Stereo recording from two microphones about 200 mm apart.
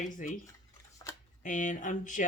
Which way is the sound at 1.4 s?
40° left (ahead or behind).